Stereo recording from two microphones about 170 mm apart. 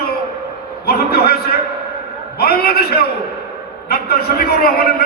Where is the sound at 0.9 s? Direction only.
65° left (ahead or behind).